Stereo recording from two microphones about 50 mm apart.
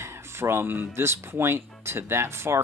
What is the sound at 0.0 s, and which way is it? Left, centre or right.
Speech, right.